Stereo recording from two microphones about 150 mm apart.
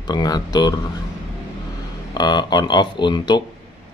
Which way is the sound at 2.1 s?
30° left (ahead or behind).